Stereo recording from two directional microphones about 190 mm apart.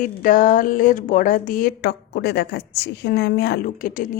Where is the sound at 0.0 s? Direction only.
45° left (ahead or behind).